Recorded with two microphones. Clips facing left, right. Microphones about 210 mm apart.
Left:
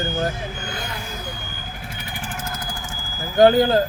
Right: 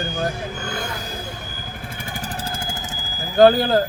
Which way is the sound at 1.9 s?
45° right (ahead or behind).